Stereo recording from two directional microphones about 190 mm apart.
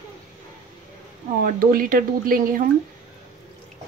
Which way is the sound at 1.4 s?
50° right (ahead or behind).